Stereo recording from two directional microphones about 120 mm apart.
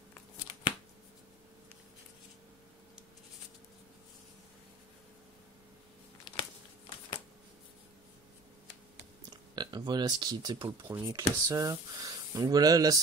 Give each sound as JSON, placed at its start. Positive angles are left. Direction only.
{"t": 9.6, "sound": "speech", "side_deg": -35}
{"t": 10.8, "sound": "speech", "side_deg": -20}
{"t": 11.1, "sound": "speech", "side_deg": -30}